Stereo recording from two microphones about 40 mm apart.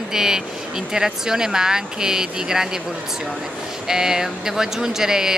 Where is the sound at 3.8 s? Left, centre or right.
Centre.